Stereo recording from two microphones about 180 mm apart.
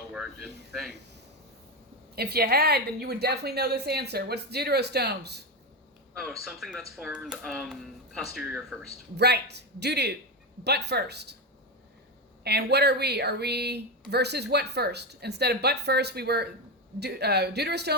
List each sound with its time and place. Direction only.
0.1 s speech: centre (ahead or behind)
2.1 s a woman's voice: 60° right (ahead or behind)
6.1 s speech: centre (ahead or behind)
9.1 s a man's voice: 70° right (ahead or behind)
12.4 s a woman's voice: 65° right (ahead or behind)